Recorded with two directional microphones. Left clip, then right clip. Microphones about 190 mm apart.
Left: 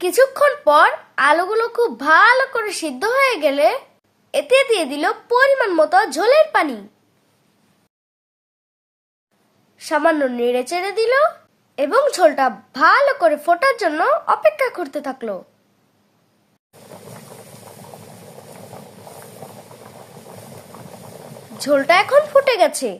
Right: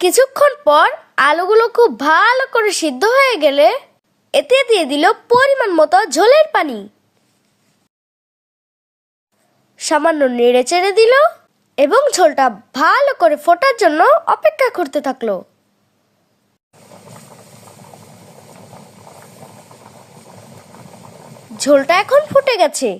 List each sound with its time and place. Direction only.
0.0 s a woman's voice: 45° right (ahead or behind)
9.7 s a woman's voice: 40° right (ahead or behind)
17.9 s vehicle: 5° left (ahead or behind)
20.5 s engine: 10° left (ahead or behind)
21.6 s a woman's voice: 35° right (ahead or behind)